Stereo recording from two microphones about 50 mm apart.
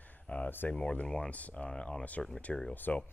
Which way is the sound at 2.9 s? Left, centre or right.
Left.